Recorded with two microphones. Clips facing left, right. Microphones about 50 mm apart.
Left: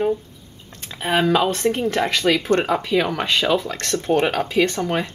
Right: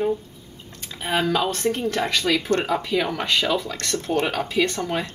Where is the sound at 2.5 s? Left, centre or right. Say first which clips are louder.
Left 3 dB; left.